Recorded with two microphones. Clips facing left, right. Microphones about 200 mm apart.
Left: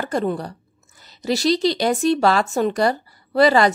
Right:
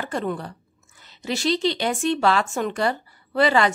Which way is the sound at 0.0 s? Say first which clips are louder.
Left 4 dB; 40° left (ahead or behind).